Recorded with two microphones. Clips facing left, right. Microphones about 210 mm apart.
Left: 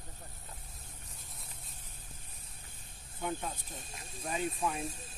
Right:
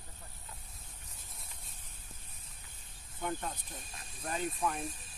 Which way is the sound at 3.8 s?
25° left (ahead or behind).